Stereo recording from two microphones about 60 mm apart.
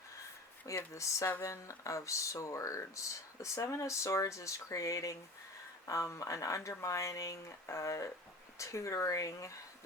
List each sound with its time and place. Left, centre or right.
0.9 s speech: left